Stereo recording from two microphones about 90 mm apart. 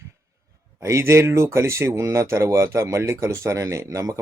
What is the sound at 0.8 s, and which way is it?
Speech, 30° right (ahead or behind).